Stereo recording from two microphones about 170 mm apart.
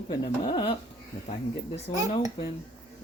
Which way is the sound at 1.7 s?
40° left (ahead or behind).